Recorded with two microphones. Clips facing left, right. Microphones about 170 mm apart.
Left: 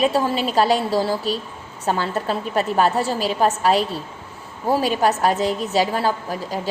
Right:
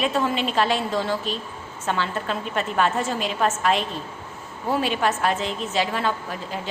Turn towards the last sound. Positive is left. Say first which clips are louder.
# left 4 dB
turn(degrees=35)  # may be behind; listen again after turning